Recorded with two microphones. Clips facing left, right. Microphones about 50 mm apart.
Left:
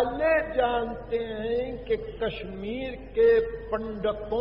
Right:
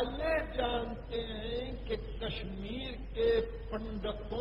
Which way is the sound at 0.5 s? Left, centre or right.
Left.